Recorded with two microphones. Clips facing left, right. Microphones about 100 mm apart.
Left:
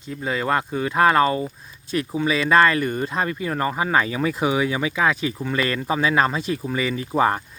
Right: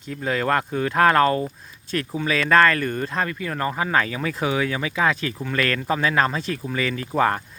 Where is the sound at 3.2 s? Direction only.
20° left (ahead or behind).